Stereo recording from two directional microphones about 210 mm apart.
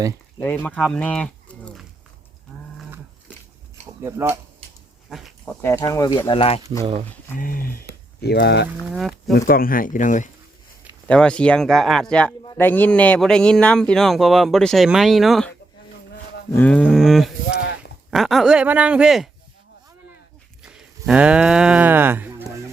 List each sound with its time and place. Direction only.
0.3 s speech: 10° left (ahead or behind)
4.0 s speech: 10° right (ahead or behind)
4.6 s dog: 30° right (ahead or behind)
5.0 s pig: centre (ahead or behind)
5.6 s speech: 15° left (ahead or behind)
7.3 s speech: 40° left (ahead or behind)
8.9 s speech: centre (ahead or behind)
9.5 s speech: 45° left (ahead or behind)
11.1 s speech: 5° left (ahead or behind)
20.6 s speech: 5° right (ahead or behind)